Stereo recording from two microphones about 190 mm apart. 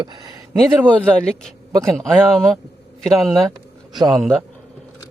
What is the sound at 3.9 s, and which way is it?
Speech, 20° right (ahead or behind).